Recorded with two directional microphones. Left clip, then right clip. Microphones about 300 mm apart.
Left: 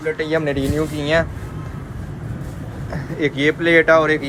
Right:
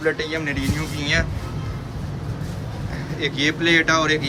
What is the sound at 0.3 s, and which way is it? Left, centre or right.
Speech, centre.